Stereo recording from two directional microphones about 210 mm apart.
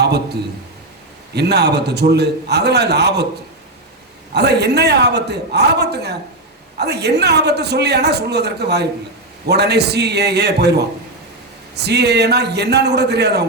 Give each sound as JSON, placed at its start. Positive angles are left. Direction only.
{"t": 0.0, "sound": "a man's voice", "side_deg": -50}
{"t": 4.4, "sound": "a man's voice", "side_deg": -50}